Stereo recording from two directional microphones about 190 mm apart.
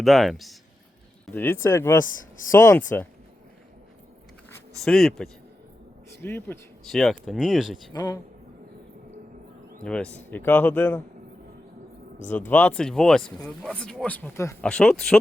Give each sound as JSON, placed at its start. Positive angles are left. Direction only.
{"t": 0.0, "sound": "speech", "side_deg": 0}
{"t": 1.3, "sound": "a man's voice", "side_deg": 10}
{"t": 4.8, "sound": "a man's voice", "side_deg": 0}
{"t": 6.8, "sound": "speech", "side_deg": 0}
{"t": 7.9, "sound": "a man's voice", "side_deg": 20}
{"t": 9.8, "sound": "a man's voice", "side_deg": 5}
{"t": 12.3, "sound": "speech", "side_deg": 10}